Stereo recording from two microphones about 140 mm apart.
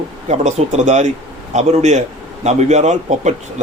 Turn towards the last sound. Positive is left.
turn(degrees=-55)  # may be behind; listen again after turning